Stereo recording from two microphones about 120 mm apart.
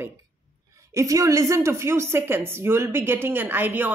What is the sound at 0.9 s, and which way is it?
A woman's voice, 25° right (ahead or behind).